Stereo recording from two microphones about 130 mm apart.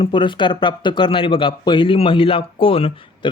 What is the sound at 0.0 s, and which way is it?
Speech, 40° left (ahead or behind).